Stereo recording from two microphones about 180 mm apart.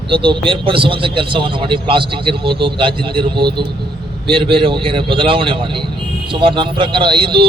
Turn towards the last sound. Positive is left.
turn(degrees=-25)  # may be behind; listen again after turning